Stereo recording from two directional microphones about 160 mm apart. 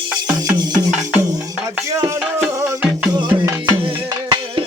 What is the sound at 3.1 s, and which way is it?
Music, 30° right (ahead or behind).